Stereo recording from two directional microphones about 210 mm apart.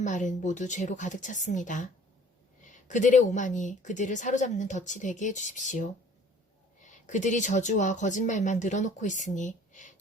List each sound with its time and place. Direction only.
0.0 s speech: 35° left (ahead or behind)